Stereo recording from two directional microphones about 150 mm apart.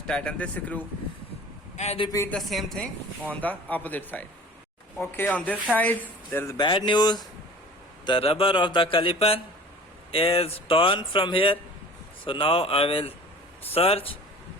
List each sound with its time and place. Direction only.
0.1 s speech: 10° left (ahead or behind)
1.7 s a man's voice: 45° left (ahead or behind)
2.3 s speech: centre (ahead or behind); by 6.6 s 15° left (ahead or behind)
6.6 s speech: 30° left (ahead or behind)